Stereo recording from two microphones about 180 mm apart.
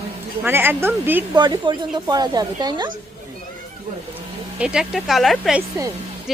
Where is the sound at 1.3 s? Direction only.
25° right (ahead or behind).